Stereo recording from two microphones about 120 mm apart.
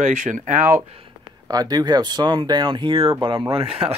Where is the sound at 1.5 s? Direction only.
30° right (ahead or behind).